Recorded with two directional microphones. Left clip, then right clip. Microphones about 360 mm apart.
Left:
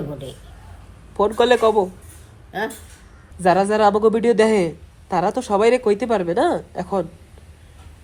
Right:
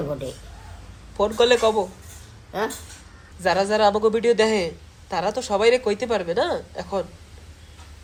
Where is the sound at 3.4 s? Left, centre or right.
Centre.